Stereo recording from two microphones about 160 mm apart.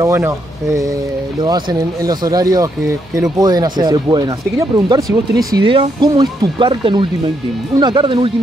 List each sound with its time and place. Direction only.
0.0 s speech: 20° right (ahead or behind)